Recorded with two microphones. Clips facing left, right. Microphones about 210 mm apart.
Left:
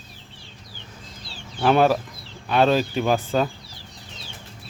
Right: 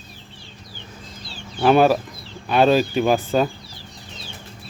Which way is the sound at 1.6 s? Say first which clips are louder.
Right 3 dB; 5° right (ahead or behind).